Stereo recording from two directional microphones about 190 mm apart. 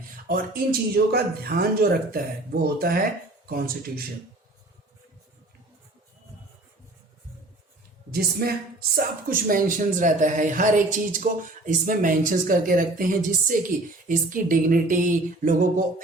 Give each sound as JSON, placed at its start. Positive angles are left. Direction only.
{"t": 0.3, "sound": "speech", "side_deg": -50}
{"t": 8.1, "sound": "speech", "side_deg": -55}